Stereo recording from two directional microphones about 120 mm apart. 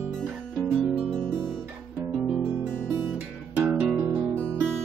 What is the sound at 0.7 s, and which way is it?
Music, 5° left (ahead or behind).